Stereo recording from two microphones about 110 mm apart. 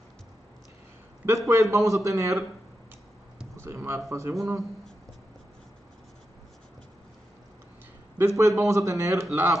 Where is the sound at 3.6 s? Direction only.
25° right (ahead or behind).